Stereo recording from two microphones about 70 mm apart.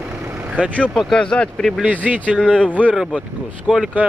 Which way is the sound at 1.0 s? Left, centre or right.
Centre.